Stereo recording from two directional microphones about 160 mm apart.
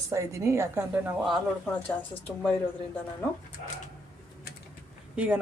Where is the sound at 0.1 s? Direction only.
20° right (ahead or behind).